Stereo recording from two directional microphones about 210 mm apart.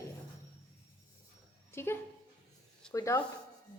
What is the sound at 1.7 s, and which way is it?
A woman's voice, 10° left (ahead or behind).